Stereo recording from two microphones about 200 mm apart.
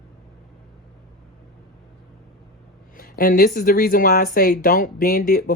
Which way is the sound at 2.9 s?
45° left (ahead or behind).